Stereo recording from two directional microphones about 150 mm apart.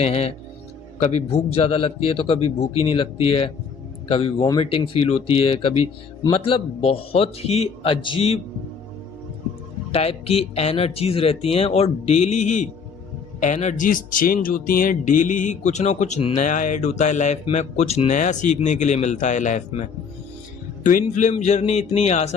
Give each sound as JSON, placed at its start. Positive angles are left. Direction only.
{"t": 0.0, "sound": "a man's voice", "side_deg": 45}
{"t": 4.8, "sound": "a man's voice", "side_deg": 40}
{"t": 9.9, "sound": "a man's voice", "side_deg": 40}
{"t": 20.8, "sound": "a man's voice", "side_deg": 60}